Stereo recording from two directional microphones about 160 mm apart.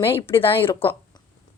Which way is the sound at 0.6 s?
15° left (ahead or behind).